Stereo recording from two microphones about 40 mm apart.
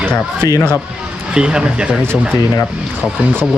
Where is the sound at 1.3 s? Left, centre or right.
Right.